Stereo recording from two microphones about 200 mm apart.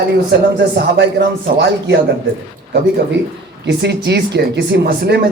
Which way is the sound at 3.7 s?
60° right (ahead or behind).